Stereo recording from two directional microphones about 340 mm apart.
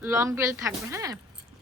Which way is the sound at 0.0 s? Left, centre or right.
Centre.